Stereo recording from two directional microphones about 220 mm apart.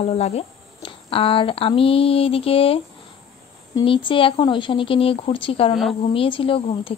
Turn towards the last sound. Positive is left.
turn(degrees=25)  # may be behind; listen again after turning